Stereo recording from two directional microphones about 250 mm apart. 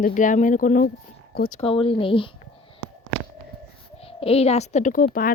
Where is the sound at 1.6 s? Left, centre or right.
Left.